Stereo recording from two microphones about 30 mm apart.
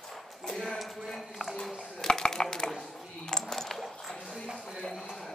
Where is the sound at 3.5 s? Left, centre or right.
Centre.